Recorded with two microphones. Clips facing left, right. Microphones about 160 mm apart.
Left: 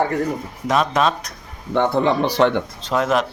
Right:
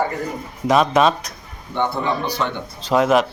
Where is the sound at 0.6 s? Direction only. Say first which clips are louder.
Right 3 dB; centre (ahead or behind).